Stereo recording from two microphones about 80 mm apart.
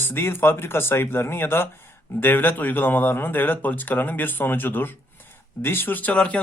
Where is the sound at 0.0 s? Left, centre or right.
Left.